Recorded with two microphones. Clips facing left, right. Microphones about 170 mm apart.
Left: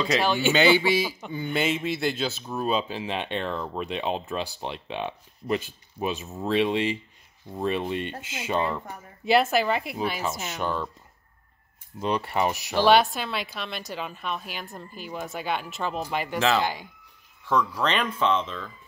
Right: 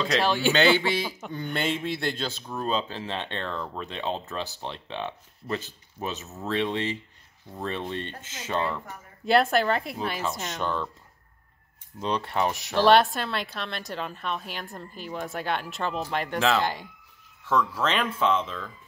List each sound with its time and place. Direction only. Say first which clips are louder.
0.0 s a man's voice: left 1 dB; centre (ahead or behind)
9.2 s speech: even; 5° left (ahead or behind)
12.0 s speech: left 1 dB; 5° left (ahead or behind)